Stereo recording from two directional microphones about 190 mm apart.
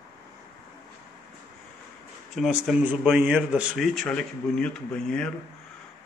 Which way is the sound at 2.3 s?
Centre (ahead or behind).